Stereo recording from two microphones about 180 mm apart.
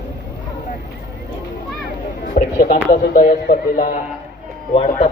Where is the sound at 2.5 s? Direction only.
55° left (ahead or behind).